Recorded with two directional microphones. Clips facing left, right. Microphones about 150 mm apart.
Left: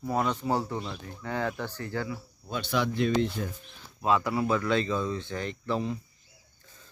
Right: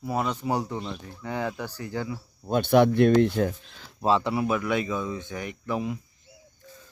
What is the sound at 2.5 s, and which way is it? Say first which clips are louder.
Speech: right 10 dB; 55° right (ahead or behind).